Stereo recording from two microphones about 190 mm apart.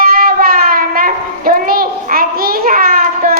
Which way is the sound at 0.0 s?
50° right (ahead or behind).